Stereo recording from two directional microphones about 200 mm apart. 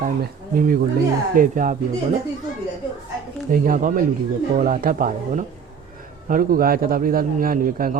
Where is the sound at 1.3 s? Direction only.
40° right (ahead or behind).